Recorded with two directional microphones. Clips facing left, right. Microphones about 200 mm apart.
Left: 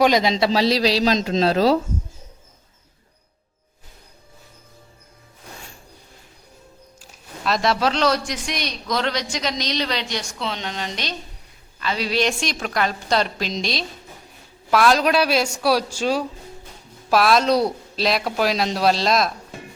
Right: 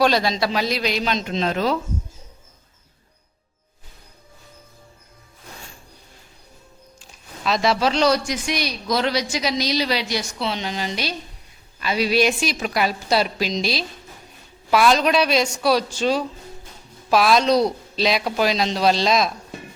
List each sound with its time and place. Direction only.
0.0 s a man's voice: 15° left (ahead or behind); by 1.8 s 35° left (ahead or behind)
7.0 s a woman's voice: centre (ahead or behind)